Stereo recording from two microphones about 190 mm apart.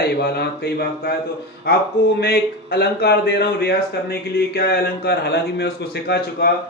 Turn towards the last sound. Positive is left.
turn(degrees=60)  # may be behind; listen again after turning